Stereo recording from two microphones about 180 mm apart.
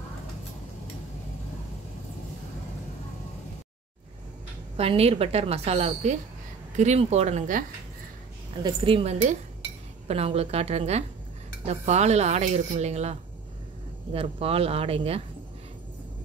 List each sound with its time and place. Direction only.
4.7 s speech: 35° right (ahead or behind)
8.6 s speech: 30° right (ahead or behind)